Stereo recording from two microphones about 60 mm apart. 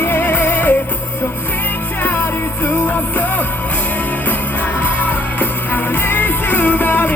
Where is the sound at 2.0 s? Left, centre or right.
Left.